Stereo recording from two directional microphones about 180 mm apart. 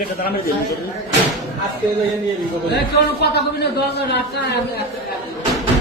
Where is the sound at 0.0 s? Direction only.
55° left (ahead or behind).